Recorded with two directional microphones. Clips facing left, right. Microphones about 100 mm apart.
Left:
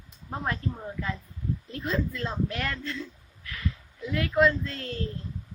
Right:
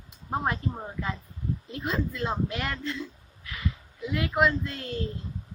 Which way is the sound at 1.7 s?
15° right (ahead or behind).